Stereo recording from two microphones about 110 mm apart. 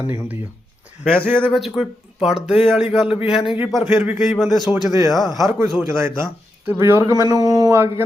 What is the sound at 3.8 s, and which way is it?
Speech, 15° right (ahead or behind).